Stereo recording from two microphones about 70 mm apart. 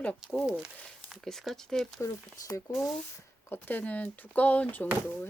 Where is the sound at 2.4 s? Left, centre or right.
Left.